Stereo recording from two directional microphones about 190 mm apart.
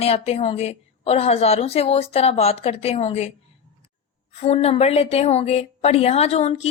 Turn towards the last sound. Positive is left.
turn(degrees=35)  # may be behind; listen again after turning